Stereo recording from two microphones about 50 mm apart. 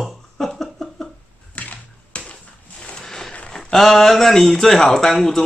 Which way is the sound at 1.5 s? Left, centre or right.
Left.